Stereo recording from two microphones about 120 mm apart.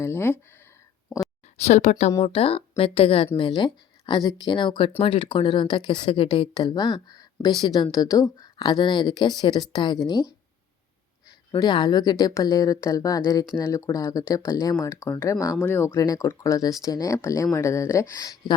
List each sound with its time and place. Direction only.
0.0 s speech: 20° left (ahead or behind)
1.6 s speech: 70° left (ahead or behind)
2.2 s speech: 50° left (ahead or behind)
11.5 s speech: 40° left (ahead or behind)